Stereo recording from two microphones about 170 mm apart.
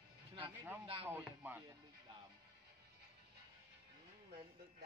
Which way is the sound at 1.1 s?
10° right (ahead or behind).